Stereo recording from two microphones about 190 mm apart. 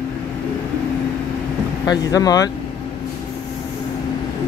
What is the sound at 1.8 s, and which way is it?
Speech, 20° left (ahead or behind).